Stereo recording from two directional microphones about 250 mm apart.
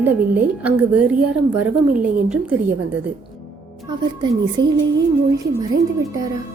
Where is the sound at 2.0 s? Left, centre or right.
Centre.